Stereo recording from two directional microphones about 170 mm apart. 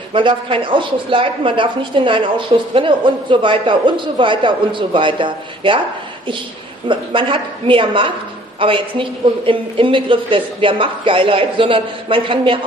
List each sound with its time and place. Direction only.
0.1 s speech: 30° right (ahead or behind)
6.9 s speech: 30° right (ahead or behind)